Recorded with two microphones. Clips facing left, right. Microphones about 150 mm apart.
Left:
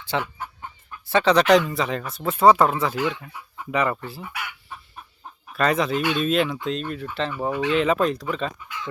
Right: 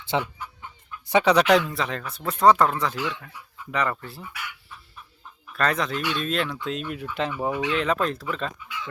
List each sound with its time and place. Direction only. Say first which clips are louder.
0.0 s speech: right 1 dB; 20° right (ahead or behind)
0.3 s chicken: left 3 dB; 50° left (ahead or behind)
1.0 s speech: left 1 dB; 15° right (ahead or behind); by 2.9 s 5° left (ahead or behind)
2.9 s speech: left 5 dB; 50° left (ahead or behind)
3.7 s speech: left 3 dB; 10° left (ahead or behind)
4.2 s chicken: left 4 dB; 65° left (ahead or behind)
5.5 s speech: left 4 dB; 5° left (ahead or behind)
6.0 s speech: left 5 dB; 50° left (ahead or behind)
6.2 s speech: left 5 dB; 5° left (ahead or behind)
6.7 s speech: left 3 dB; 10° right (ahead or behind)
7.7 s speech: left 7 dB; centre (ahead or behind)